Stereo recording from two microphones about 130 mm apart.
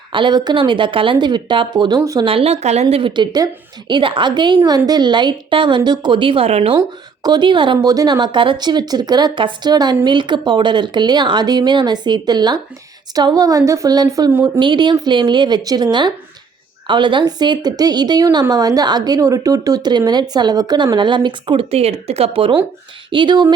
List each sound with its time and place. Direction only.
0.1 s a woman's voice: 35° right (ahead or behind)
2.2 s speech: 50° right (ahead or behind)
2.9 s a woman's voice: 40° right (ahead or behind)
6.7 s a woman's voice: 30° right (ahead or behind)